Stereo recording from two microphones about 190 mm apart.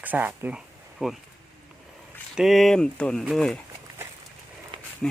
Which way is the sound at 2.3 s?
Centre (ahead or behind).